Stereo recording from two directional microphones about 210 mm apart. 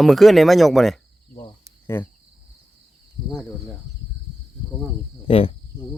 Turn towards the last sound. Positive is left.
turn(degrees=25)  # may be behind; listen again after turning